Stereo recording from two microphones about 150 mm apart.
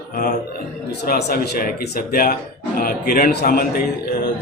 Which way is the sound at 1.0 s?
85° left.